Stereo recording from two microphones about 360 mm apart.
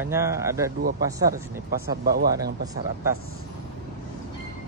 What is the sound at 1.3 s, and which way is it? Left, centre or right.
Speech, right.